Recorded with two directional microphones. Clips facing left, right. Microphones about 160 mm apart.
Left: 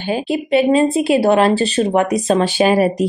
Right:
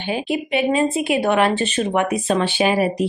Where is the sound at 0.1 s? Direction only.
35° left (ahead or behind).